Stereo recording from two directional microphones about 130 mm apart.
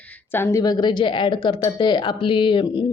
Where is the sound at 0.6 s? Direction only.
30° left (ahead or behind).